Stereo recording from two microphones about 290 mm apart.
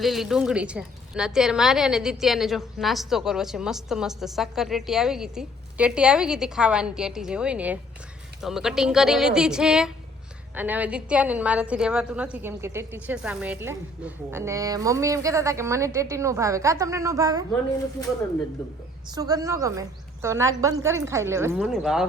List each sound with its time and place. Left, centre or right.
0.0 s a woman's voice: centre
19.1 s a woman's voice: centre